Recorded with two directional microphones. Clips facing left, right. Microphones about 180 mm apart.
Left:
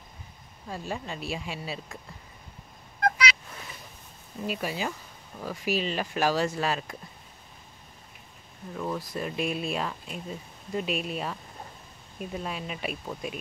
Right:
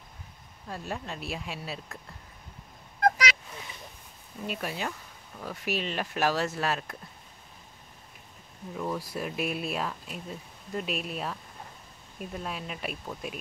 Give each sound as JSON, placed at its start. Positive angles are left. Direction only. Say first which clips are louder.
{"t": 0.7, "sound": "speech", "louder": "left 2 dB", "side_deg": 0}
{"t": 3.0, "sound": "a sound", "louder": "right 1 dB", "side_deg": -45}
{"t": 4.5, "sound": "speech", "louder": "left 2 dB", "side_deg": 0}
{"t": 8.7, "sound": "speech", "louder": "left 1 dB", "side_deg": -5}